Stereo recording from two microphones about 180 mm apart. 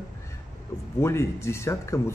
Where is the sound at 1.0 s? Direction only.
15° left (ahead or behind).